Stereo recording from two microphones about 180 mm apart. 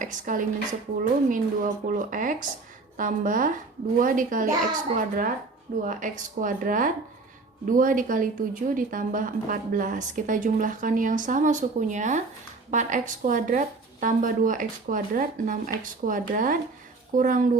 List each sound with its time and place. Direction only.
0.0 s a woman's voice: 45° right (ahead or behind)